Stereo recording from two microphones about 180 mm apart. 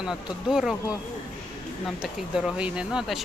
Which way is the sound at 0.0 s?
5° right (ahead or behind).